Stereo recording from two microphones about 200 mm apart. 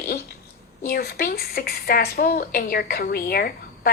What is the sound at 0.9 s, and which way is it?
A woman's voice, 50° left (ahead or behind).